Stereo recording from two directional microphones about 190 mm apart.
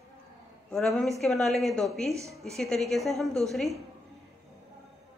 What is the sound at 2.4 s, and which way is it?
A woman's voice, centre (ahead or behind).